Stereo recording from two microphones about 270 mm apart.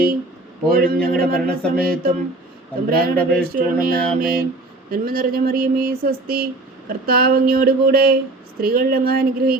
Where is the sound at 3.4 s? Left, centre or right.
Right.